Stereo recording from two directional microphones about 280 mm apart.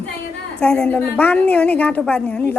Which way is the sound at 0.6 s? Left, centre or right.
Centre.